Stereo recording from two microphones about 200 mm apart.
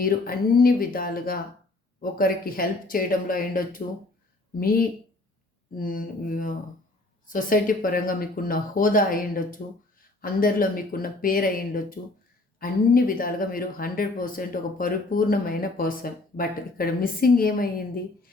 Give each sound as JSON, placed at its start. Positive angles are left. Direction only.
{"t": 0.0, "sound": "speech", "side_deg": 50}
{"t": 5.7, "sound": "speech", "side_deg": 45}